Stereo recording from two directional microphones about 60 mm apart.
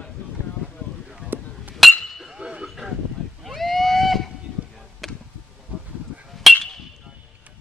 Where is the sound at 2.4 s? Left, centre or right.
Centre.